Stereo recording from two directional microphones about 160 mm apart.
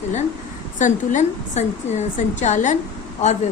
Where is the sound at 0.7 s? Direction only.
50° left (ahead or behind).